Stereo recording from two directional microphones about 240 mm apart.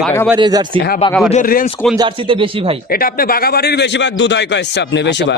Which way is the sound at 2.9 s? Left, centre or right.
Left.